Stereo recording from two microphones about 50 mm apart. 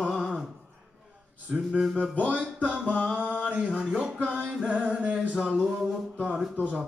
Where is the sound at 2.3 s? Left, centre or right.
Right.